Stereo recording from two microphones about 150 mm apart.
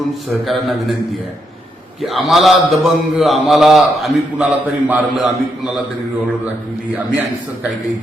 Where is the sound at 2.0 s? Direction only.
Centre (ahead or behind).